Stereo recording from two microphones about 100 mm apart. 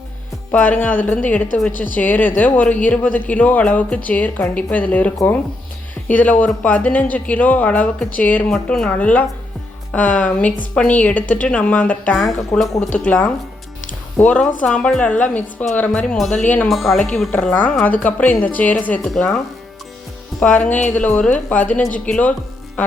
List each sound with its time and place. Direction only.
0.5 s speech: 15° left (ahead or behind)
12.1 s speech: centre (ahead or behind)
12.9 s speech: 15° left (ahead or behind)
14.2 s speech: 15° left (ahead or behind)
17.3 s speech: 15° left (ahead or behind)
20.4 s speech: 15° left (ahead or behind)